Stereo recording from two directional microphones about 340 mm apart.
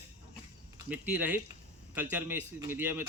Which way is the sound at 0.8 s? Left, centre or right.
Centre.